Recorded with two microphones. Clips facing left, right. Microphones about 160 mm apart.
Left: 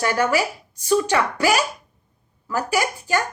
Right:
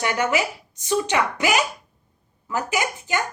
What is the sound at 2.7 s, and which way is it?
Speech, 20° right (ahead or behind).